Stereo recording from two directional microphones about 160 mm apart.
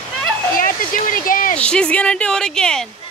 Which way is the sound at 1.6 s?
5° left (ahead or behind).